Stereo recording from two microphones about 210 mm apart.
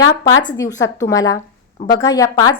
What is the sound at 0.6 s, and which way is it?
A woman's voice, 15° left (ahead or behind).